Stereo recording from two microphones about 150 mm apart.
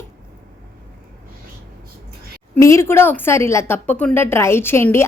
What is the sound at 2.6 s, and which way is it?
A woman's voice, 20° left (ahead or behind).